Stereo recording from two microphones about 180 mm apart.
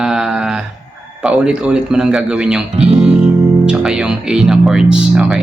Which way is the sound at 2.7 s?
35° right (ahead or behind).